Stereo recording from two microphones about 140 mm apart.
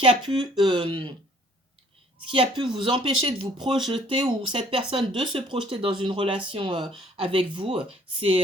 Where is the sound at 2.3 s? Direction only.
35° right (ahead or behind).